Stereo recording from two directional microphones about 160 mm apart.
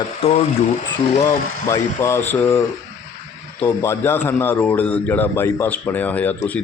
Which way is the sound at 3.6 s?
15° left (ahead or behind).